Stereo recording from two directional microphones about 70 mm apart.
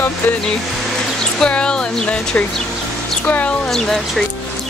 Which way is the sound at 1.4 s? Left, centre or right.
Centre.